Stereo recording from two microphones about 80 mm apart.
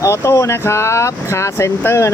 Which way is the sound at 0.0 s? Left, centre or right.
Left.